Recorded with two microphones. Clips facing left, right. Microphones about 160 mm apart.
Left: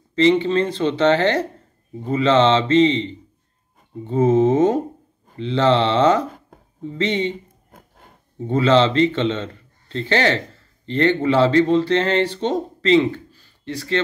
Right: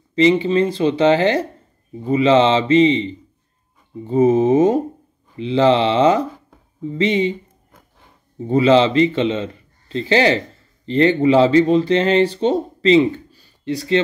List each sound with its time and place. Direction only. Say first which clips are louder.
0.1 s speech: right 1 dB; 10° right (ahead or behind)
4.1 s speech: right 2 dB; 10° right (ahead or behind)
8.5 s speech: right 3 dB; 10° right (ahead or behind)